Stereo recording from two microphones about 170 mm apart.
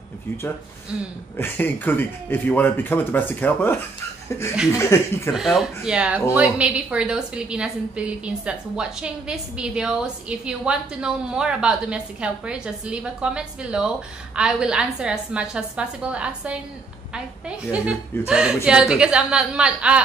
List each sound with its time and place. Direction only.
1.3 s speech: 10° left (ahead or behind)
4.7 s speech: 15° left (ahead or behind)
5.3 s a woman's voice: centre (ahead or behind)